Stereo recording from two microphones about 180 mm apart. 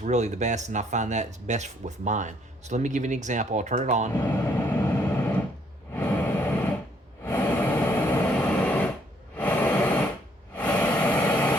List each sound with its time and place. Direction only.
0.0 s speech: 40° right (ahead or behind)
4.4 s vehicle: 10° left (ahead or behind)
5.9 s a sound: 10° left (ahead or behind)